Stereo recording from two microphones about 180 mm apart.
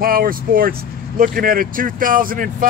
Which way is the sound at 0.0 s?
55° right (ahead or behind).